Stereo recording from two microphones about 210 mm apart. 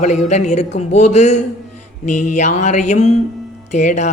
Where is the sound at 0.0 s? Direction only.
35° left (ahead or behind).